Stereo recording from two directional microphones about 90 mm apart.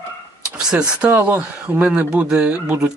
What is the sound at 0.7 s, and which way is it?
Speech, 10° right (ahead or behind).